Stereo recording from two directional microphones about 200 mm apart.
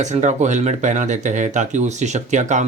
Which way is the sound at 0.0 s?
35° right (ahead or behind).